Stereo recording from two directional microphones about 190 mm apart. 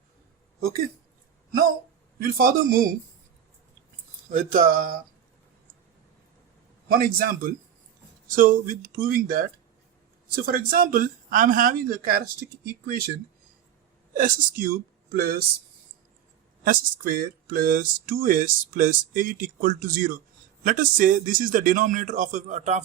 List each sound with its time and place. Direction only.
2.2 s speech: 50° right (ahead or behind)
4.3 s speech: 40° right (ahead or behind)
6.8 s speech: 50° right (ahead or behind)
14.2 s speech: 50° right (ahead or behind)
16.6 s speech: 50° right (ahead or behind)